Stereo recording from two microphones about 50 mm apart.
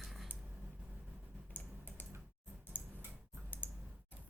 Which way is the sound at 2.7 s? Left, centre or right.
Left.